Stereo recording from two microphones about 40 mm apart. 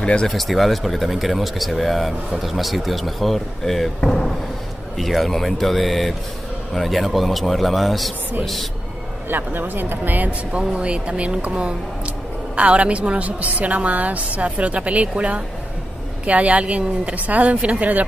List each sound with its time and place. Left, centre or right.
0.0 s speech: left
0.3 s speech: centre
4.9 s speech: centre
9.3 s speech: right
10.8 s a woman's voice: right